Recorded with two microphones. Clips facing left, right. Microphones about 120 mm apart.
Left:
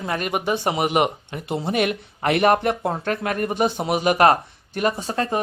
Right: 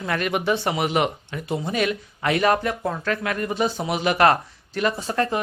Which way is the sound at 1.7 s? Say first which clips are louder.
Left 4 dB; 55° left (ahead or behind).